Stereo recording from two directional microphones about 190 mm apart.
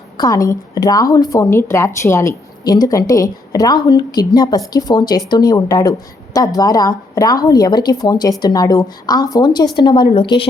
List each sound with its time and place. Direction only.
0.2 s a woman's voice: 20° left (ahead or behind)